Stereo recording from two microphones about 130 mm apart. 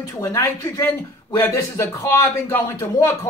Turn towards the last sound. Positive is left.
turn(degrees=20)  # may be behind; listen again after turning